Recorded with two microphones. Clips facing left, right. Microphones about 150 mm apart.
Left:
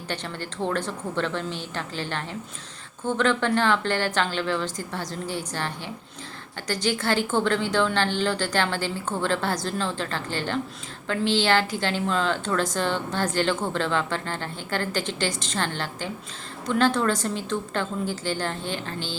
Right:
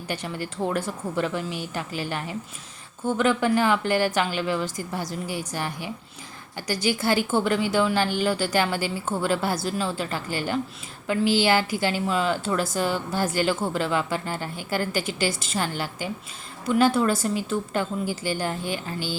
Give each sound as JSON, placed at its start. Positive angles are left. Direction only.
{"t": 0.1, "sound": "a woman's voice", "side_deg": -10}